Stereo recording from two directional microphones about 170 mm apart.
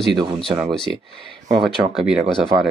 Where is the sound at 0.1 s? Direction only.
25° right (ahead or behind).